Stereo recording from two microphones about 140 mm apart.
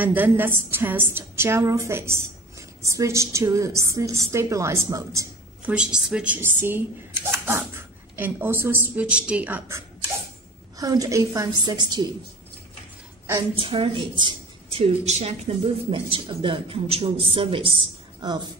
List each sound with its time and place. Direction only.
0.0 s a woman's voice: 10° right (ahead or behind)
5.7 s a woman's voice: 5° right (ahead or behind)
10.8 s a woman's voice: 25° right (ahead or behind)
13.6 s a woman's voice: 40° right (ahead or behind)